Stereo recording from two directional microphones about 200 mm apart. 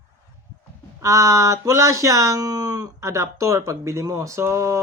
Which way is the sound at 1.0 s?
15° right (ahead or behind).